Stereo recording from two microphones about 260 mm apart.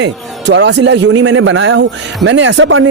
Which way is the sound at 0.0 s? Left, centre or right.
Right.